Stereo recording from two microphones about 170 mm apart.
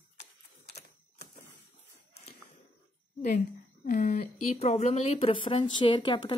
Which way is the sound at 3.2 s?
50° left (ahead or behind).